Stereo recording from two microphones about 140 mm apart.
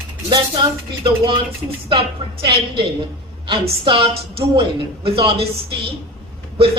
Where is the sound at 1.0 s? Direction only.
40° right (ahead or behind).